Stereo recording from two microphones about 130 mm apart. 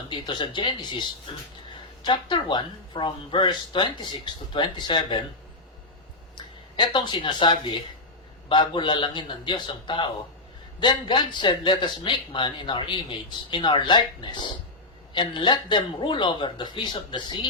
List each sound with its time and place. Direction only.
0.1 s a man's voice: 35° left (ahead or behind)
2.0 s a man's voice: 35° left (ahead or behind)
6.3 s a man's voice: 35° left (ahead or behind)